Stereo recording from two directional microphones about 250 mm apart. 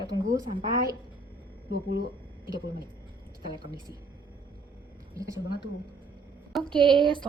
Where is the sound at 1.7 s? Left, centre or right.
Right.